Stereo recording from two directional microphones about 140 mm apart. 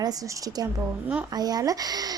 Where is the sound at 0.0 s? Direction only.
25° right (ahead or behind).